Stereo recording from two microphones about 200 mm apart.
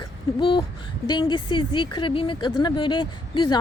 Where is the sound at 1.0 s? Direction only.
20° left (ahead or behind).